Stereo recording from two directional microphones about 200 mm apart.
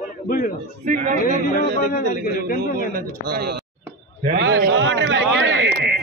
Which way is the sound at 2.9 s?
50° right (ahead or behind).